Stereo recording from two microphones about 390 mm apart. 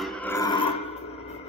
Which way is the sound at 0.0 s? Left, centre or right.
Centre.